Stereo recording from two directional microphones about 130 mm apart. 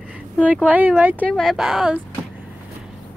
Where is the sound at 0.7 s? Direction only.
10° right (ahead or behind).